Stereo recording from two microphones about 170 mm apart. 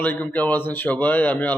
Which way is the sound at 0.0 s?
10° left (ahead or behind).